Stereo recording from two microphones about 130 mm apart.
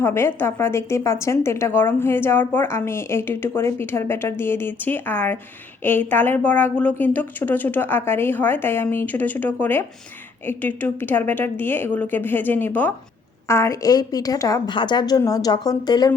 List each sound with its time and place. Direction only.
0.0 s a woman's voice: 20° left (ahead or behind)